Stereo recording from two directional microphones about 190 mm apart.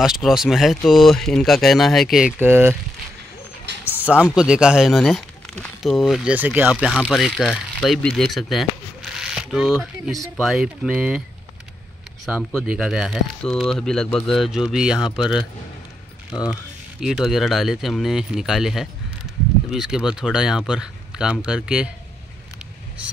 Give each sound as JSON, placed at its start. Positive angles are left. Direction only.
{"t": 0.0, "sound": "speech", "side_deg": -5}
{"t": 3.7, "sound": "a sound", "side_deg": -65}
{"t": 4.0, "sound": "speech", "side_deg": -5}
{"t": 12.6, "sound": "speech", "side_deg": 0}
{"t": 17.0, "sound": "speech", "side_deg": 0}